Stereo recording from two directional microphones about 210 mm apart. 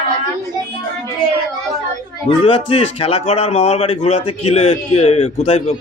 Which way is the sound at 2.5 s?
25° left (ahead or behind).